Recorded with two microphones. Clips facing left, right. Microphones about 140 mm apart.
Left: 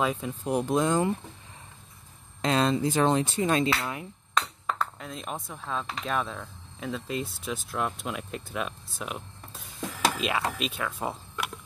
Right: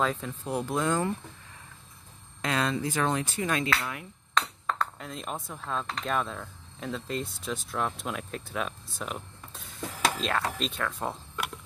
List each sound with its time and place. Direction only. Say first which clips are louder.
0.0 s speech: left 1 dB; 10° left (ahead or behind)
2.4 s speech: left 4 dB; 25° left (ahead or behind)
4.4 s speech: even; 5° left (ahead or behind)